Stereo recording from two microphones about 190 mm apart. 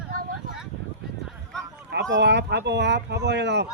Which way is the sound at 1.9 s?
70° right (ahead or behind).